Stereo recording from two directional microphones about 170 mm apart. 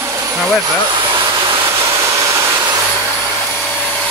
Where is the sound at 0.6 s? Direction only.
30° right (ahead or behind).